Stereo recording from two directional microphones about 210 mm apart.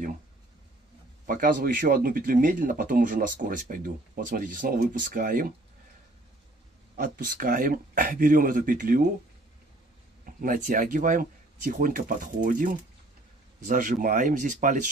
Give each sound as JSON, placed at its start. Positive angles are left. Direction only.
{"t": 1.2, "sound": "speech", "side_deg": -40}
{"t": 7.0, "sound": "speech", "side_deg": -40}
{"t": 10.2, "sound": "speech", "side_deg": -40}